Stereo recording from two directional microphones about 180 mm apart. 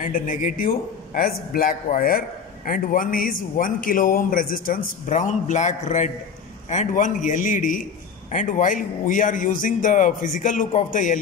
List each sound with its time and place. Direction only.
0.0 s a man's voice: 50° left (ahead or behind)